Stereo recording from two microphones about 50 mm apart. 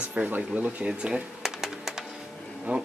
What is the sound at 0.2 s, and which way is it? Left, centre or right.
Speech, right.